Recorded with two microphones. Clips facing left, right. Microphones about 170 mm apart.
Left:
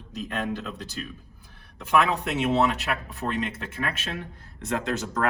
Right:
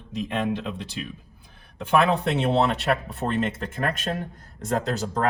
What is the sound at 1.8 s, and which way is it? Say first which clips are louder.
Speech: right 3 dB; 30° right (ahead or behind).